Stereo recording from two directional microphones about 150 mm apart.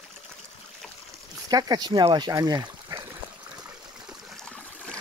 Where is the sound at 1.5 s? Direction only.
25° right (ahead or behind).